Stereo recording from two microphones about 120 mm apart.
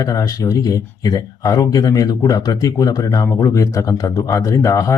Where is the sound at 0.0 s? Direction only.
30° left (ahead or behind).